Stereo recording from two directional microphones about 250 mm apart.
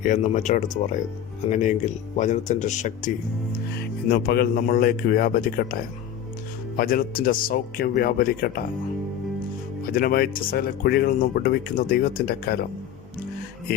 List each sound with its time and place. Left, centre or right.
0.0 s speech: left
3.5 s speech: left
9.8 s speech: left